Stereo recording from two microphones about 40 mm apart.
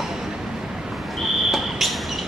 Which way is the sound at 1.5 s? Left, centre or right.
Centre.